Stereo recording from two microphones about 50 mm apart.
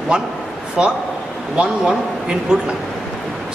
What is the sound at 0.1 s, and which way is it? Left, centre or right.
A man's voice, centre.